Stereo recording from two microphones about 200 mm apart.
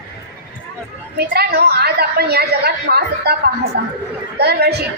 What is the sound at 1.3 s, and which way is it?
A woman's voice, 50° right (ahead or behind).